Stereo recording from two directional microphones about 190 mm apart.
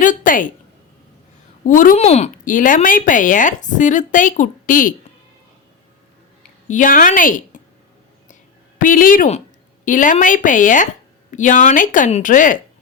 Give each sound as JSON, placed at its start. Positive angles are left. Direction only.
{"t": 0.0, "sound": "a woman's voice", "side_deg": 45}
{"t": 1.6, "sound": "speech", "side_deg": 45}
{"t": 6.7, "sound": "speech", "side_deg": 45}
{"t": 8.8, "sound": "speech", "side_deg": 45}